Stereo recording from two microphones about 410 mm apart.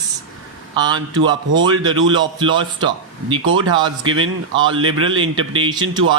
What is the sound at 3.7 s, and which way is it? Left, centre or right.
A man's voice, centre.